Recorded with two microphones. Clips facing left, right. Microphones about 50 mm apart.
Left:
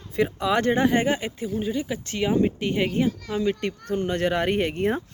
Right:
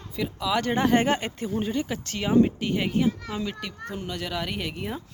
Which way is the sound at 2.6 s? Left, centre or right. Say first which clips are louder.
Left 3 dB; left.